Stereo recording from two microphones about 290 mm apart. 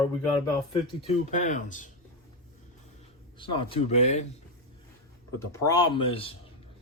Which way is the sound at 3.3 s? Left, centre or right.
Centre.